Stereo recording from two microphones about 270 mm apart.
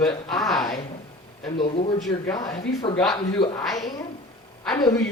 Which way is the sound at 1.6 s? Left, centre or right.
Left.